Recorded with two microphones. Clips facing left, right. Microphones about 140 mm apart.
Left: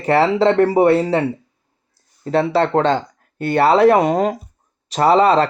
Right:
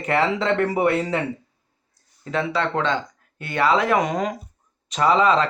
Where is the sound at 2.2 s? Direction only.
35° left (ahead or behind).